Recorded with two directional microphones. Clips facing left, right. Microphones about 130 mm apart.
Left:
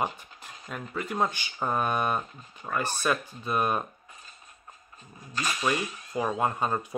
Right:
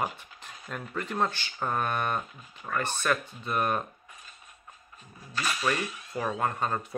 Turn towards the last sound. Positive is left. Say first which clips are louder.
# left 2 dB
turn(degrees=10)  # may be behind; listen again after turning